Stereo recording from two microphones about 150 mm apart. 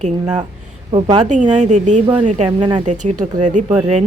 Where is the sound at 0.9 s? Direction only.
35° right (ahead or behind).